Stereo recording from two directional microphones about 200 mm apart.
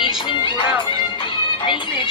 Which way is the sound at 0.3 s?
25° left (ahead or behind).